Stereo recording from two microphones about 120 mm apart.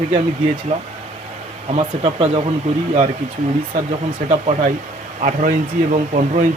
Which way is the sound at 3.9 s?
75° right (ahead or behind).